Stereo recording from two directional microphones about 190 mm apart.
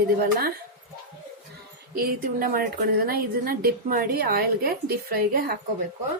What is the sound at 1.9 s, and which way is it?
A woman's voice, 50° right (ahead or behind).